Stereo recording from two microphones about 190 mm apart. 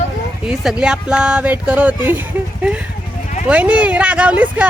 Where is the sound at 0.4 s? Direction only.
5° right (ahead or behind).